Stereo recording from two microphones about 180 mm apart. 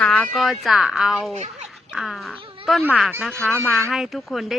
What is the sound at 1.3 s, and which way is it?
Speech, 40° right (ahead or behind).